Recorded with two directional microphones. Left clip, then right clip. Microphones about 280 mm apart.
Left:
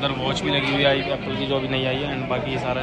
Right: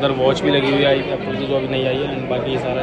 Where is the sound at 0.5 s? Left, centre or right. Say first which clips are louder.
Right 4 dB; left.